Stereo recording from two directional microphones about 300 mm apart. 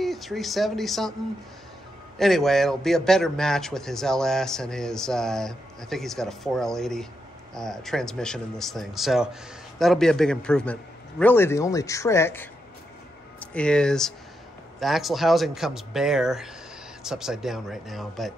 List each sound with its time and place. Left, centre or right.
0.0 s speech: centre
2.1 s speech: centre